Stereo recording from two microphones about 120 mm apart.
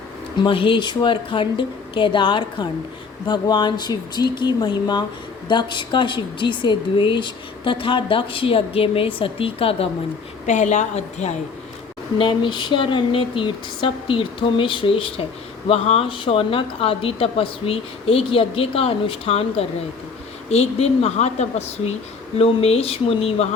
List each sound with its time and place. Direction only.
0.3 s speech: 45° left (ahead or behind)
10.4 s a woman's voice: 90° left
12.2 s speech: 40° left (ahead or behind)